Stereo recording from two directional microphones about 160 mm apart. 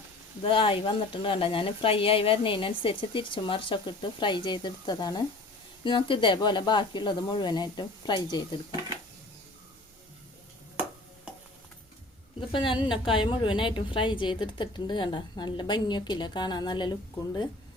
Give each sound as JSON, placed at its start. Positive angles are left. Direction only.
{"t": 0.4, "sound": "a woman's voice", "side_deg": 35}
{"t": 12.5, "sound": "a woman's voice", "side_deg": 30}